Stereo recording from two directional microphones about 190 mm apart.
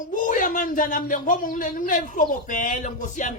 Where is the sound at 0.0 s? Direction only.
45° left (ahead or behind).